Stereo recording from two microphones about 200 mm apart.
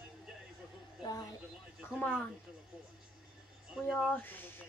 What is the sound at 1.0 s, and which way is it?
Speech, 20° left (ahead or behind).